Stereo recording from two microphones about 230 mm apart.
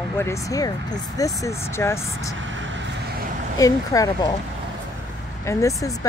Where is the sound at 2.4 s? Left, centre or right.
Right.